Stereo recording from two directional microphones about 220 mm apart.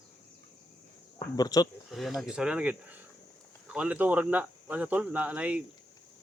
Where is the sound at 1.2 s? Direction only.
15° left (ahead or behind).